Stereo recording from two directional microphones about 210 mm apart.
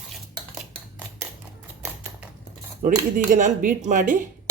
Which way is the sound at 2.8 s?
40° right (ahead or behind).